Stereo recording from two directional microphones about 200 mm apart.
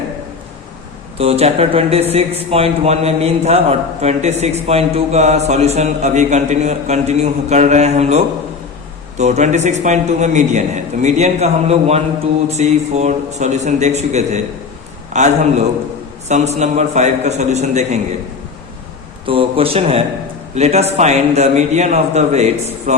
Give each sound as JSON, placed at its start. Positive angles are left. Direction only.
{"t": 1.2, "sound": "a man's voice", "side_deg": -30}
{"t": 19.2, "sound": "a man's voice", "side_deg": -25}